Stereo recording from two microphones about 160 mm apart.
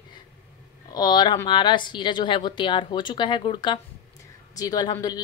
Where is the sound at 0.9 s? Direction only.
25° left (ahead or behind).